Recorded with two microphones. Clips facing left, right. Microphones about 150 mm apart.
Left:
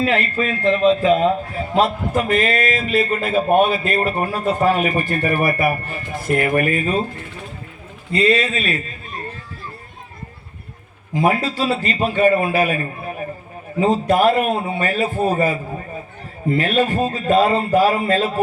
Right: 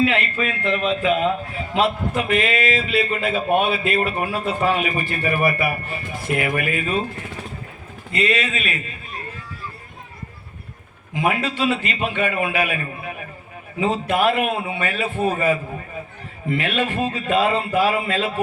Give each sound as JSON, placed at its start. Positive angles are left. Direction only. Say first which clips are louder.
{"t": 0.0, "sound": "a man's voice", "louder": "left 1 dB", "side_deg": 40}
{"t": 8.1, "sound": "a man's voice", "louder": "left 5 dB", "side_deg": 35}
{"t": 11.1, "sound": "a man's voice", "louder": "left 4 dB", "side_deg": 35}